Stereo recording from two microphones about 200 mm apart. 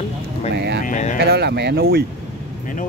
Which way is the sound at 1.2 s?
55° right (ahead or behind).